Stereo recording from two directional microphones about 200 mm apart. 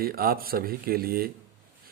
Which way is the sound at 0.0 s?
50° right (ahead or behind).